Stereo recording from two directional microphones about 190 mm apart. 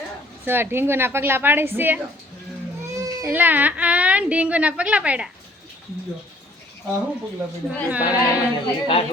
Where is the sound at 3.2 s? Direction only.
10° right (ahead or behind).